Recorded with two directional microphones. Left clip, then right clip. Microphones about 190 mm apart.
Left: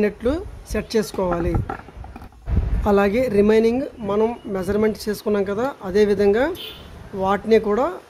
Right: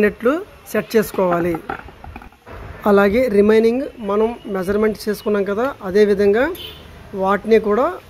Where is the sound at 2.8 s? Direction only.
15° right (ahead or behind).